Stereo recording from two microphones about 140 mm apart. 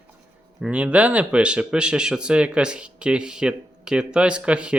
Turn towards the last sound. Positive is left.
turn(degrees=-5)  # may be behind; listen again after turning